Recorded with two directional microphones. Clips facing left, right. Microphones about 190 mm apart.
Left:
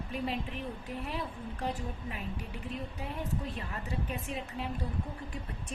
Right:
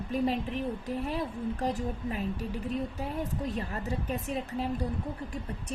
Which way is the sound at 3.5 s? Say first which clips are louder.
Right 5 dB; 40° right (ahead or behind).